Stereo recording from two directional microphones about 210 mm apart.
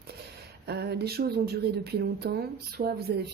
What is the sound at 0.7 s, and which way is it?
Speech, 50° right (ahead or behind).